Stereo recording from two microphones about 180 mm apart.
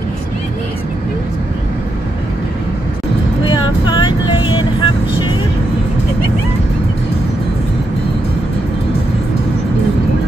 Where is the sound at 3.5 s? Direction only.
25° left (ahead or behind).